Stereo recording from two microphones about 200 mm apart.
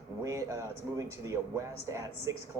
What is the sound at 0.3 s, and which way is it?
Speech, 15° right (ahead or behind).